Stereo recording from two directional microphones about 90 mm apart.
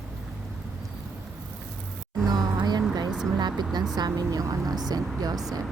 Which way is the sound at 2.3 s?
50° right (ahead or behind).